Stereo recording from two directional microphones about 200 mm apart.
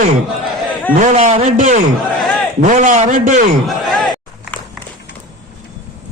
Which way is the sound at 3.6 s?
Centre (ahead or behind).